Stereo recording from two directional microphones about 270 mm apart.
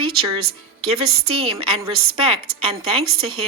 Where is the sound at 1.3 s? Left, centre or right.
Right.